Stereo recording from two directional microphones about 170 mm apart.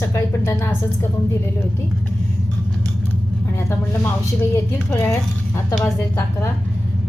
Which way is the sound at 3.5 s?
15° left (ahead or behind).